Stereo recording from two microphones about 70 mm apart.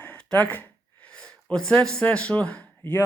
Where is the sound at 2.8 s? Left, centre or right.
Left.